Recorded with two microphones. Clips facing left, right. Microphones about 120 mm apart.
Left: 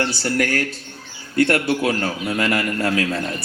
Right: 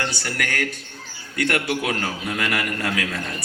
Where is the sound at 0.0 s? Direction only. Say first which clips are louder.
Left 6 dB; 30° left (ahead or behind).